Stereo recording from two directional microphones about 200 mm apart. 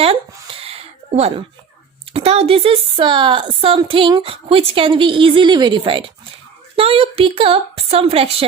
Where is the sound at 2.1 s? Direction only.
30° right (ahead or behind).